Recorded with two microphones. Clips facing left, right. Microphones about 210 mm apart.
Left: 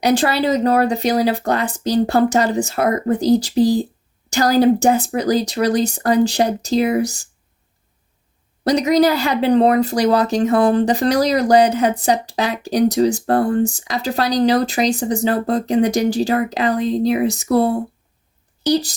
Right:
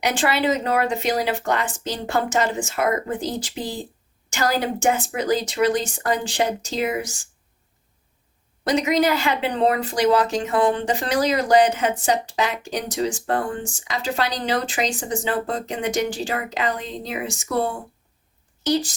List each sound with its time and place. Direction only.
0.0 s speech: 35° left (ahead or behind)
8.6 s speech: 40° left (ahead or behind)